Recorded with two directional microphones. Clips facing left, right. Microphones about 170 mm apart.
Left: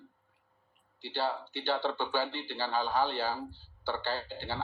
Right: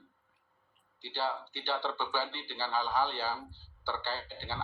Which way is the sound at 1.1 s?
15° left (ahead or behind).